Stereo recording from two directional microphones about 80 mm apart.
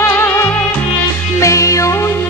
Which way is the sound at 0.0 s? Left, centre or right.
Left.